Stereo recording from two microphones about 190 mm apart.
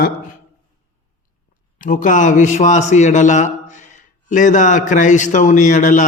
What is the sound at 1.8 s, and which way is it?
A man's voice, 45° left (ahead or behind).